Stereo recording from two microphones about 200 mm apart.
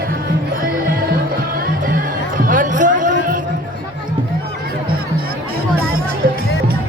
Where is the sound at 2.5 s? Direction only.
40° right (ahead or behind).